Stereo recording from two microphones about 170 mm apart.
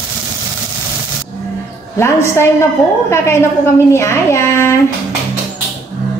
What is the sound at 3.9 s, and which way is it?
Speech, 15° left (ahead or behind).